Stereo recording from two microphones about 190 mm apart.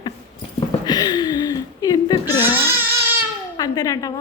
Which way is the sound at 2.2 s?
10° right (ahead or behind).